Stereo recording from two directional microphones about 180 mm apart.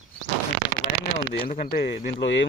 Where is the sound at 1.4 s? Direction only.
50° left (ahead or behind).